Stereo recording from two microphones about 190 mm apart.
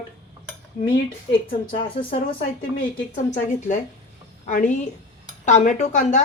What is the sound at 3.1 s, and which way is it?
A woman's voice, 45° left (ahead or behind).